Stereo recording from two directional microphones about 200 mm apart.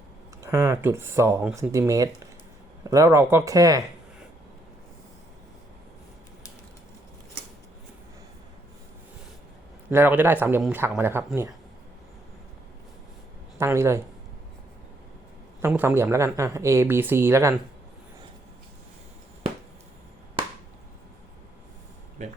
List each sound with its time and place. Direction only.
0.4 s speech: 15° right (ahead or behind)
9.9 s speech: 10° right (ahead or behind)
13.6 s speech: 15° right (ahead or behind)
15.6 s speech: 10° right (ahead or behind)
22.2 s a sound: 35° right (ahead or behind)